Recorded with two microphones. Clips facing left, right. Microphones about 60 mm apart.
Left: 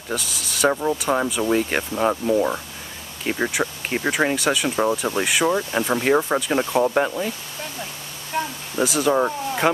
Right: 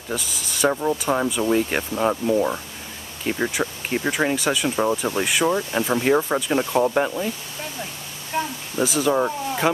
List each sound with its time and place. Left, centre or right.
0.1 s speech: centre
8.3 s a sound: centre
8.7 s speech: centre